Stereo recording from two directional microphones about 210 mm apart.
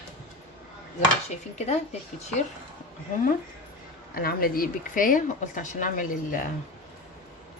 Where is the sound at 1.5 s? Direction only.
30° left (ahead or behind).